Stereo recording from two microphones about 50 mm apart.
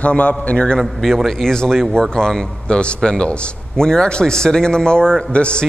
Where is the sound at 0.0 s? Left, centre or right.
Left.